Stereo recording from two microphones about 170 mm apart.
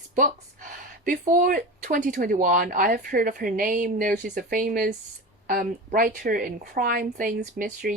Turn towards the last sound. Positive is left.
turn(degrees=-55)  # may be behind; listen again after turning